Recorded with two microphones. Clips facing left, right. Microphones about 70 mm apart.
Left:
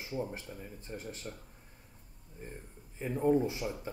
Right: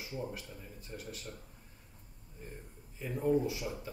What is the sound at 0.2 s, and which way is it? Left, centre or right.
A man's voice, left.